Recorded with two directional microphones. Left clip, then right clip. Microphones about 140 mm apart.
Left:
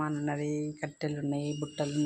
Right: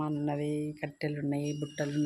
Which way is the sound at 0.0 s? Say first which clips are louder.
Even; 10° right (ahead or behind).